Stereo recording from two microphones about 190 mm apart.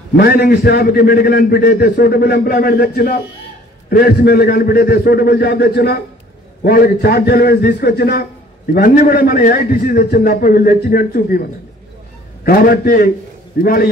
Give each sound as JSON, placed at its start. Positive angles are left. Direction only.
{"t": 0.2, "sound": "a man's voice", "side_deg": 55}
{"t": 12.4, "sound": "a man's voice", "side_deg": 50}